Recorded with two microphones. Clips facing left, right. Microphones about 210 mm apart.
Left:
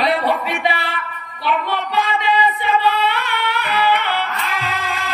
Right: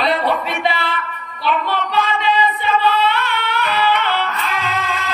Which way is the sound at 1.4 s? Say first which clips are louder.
Right 1 dB; 15° left (ahead or behind).